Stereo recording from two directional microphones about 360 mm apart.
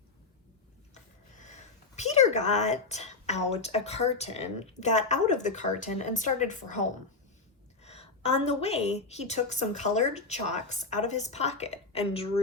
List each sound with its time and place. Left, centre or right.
2.0 s a woman's voice: centre
7.8 s a woman's voice: centre